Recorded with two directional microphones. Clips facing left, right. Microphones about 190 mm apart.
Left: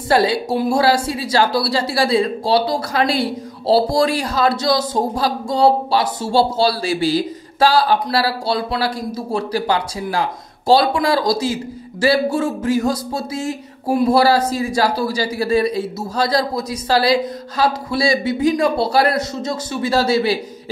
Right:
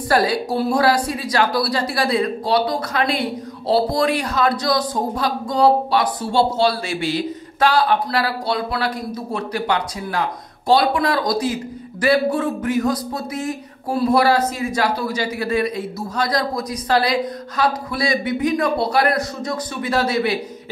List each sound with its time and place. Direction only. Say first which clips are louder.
0.1 s a man's voice: left 2 dB; 25° left (ahead or behind)